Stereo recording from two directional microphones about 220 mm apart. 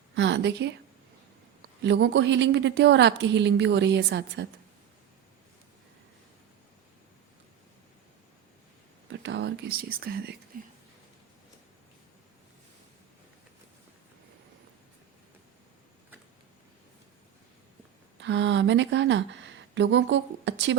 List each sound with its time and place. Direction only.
0.2 s a woman's voice: 55° right (ahead or behind)
1.8 s a woman's voice: 50° right (ahead or behind)
9.0 s whispering: 55° right (ahead or behind)
10.5 s speech: 40° right (ahead or behind)
18.2 s speech: 55° right (ahead or behind)